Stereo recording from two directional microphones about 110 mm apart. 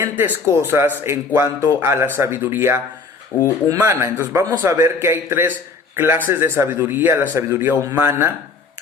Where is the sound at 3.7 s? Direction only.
25° right (ahead or behind).